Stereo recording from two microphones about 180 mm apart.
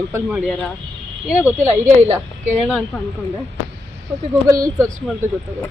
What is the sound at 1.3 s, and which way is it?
Speech, 10° right (ahead or behind).